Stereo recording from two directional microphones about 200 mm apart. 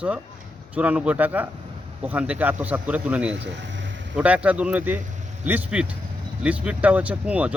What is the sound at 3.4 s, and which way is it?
Speech, 65° right (ahead or behind).